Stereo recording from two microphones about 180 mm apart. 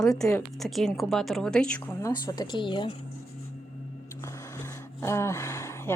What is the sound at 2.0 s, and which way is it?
Speech, 20° left (ahead or behind).